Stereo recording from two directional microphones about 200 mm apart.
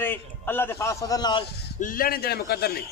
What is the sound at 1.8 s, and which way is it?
A man's voice, 45° left (ahead or behind).